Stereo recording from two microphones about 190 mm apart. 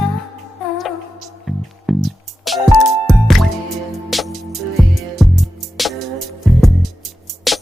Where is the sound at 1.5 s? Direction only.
Centre (ahead or behind).